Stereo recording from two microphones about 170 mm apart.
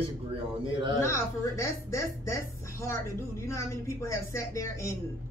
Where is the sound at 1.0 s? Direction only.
15° left (ahead or behind).